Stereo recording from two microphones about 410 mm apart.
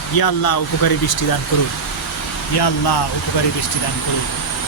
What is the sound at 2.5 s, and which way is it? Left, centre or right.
Speech, left.